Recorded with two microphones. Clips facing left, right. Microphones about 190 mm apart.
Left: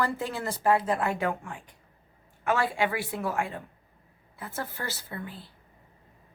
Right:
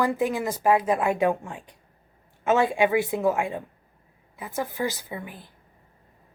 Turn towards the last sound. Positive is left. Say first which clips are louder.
# right 2 dB
turn(degrees=-15)  # may be behind; listen again after turning